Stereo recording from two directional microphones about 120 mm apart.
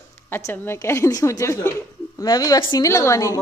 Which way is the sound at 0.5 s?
20° left (ahead or behind).